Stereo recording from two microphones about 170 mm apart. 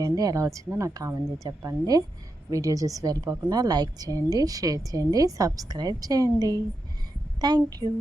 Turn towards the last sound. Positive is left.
turn(degrees=-25)  # may be behind; listen again after turning